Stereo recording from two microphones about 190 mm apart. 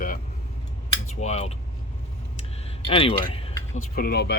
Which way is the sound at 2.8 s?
30° left (ahead or behind).